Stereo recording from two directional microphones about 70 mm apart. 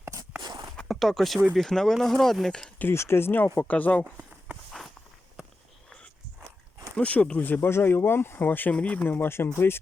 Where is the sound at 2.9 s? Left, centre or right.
Left.